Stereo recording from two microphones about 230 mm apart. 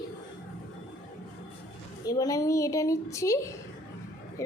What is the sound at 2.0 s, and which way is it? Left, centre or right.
Child singing, centre.